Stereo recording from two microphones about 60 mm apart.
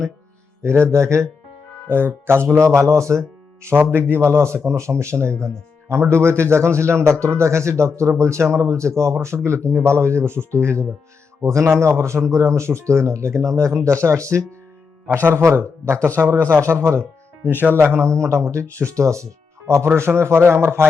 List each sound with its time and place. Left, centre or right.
0.6 s speech: right
1.9 s speech: right
17.6 s speech: right